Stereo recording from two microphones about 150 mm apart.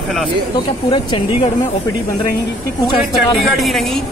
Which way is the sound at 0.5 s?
30° left (ahead or behind).